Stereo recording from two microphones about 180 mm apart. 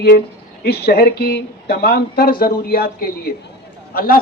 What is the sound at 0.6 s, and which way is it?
A man's voice, 60° left (ahead or behind).